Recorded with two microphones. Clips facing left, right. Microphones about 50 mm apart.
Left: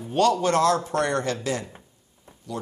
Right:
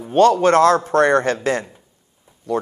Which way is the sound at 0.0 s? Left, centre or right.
Right.